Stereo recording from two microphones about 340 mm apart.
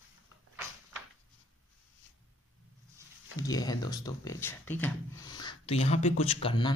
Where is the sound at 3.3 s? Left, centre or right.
Centre.